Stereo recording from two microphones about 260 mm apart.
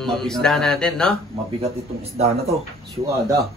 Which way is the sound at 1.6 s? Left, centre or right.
Right.